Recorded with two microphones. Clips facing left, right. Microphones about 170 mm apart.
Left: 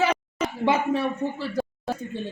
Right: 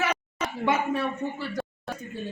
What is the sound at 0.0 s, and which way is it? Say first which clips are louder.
Speech: left 5 dB; 30° left (ahead or behind).